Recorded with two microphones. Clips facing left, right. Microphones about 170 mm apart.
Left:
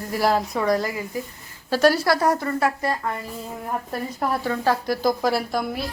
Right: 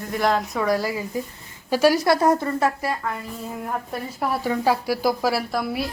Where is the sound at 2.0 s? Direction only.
20° right (ahead or behind).